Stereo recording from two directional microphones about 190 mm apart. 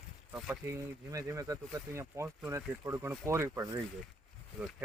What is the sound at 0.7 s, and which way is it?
Speech, 15° right (ahead or behind).